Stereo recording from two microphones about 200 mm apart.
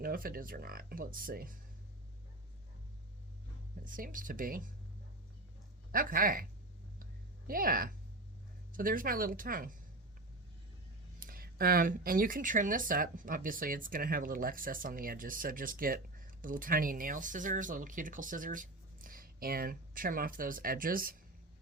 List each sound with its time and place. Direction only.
0.0 s speech: 45° right (ahead or behind)
3.8 s speech: 45° right (ahead or behind)
5.9 s speech: 45° right (ahead or behind)
7.0 s a sound: 45° right (ahead or behind)
8.7 s speech: 45° right (ahead or behind)
11.2 s speech: 45° right (ahead or behind)